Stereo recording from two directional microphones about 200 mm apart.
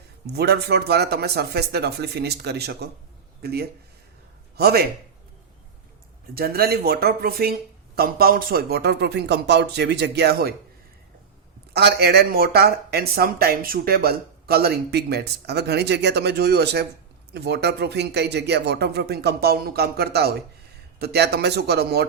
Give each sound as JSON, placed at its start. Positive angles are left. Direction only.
{"t": 0.3, "sound": "speech", "side_deg": -55}
{"t": 6.3, "sound": "speech", "side_deg": -50}
{"t": 11.7, "sound": "speech", "side_deg": -55}